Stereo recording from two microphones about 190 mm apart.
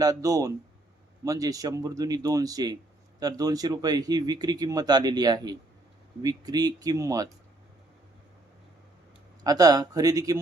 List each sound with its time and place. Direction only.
0.0 s speech: 20° right (ahead or behind)
9.4 s speech: 20° right (ahead or behind)